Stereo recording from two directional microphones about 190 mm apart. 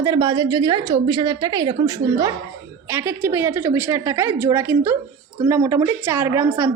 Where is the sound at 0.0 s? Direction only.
20° right (ahead or behind).